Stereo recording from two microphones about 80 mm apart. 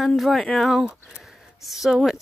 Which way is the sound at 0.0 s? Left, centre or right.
Centre.